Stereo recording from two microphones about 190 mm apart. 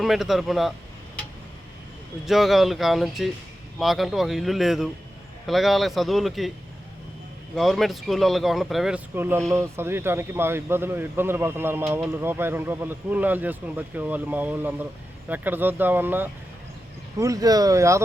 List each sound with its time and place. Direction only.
0.0 s speech: centre (ahead or behind)
2.2 s speech: centre (ahead or behind)
7.5 s speech: centre (ahead or behind); by 18.0 s 15° right (ahead or behind)